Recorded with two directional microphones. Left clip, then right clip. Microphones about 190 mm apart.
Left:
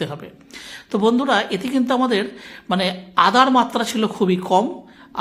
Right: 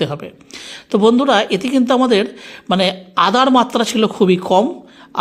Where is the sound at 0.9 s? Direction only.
25° right (ahead or behind).